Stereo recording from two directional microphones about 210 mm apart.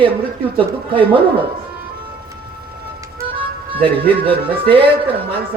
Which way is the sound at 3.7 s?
25° right (ahead or behind).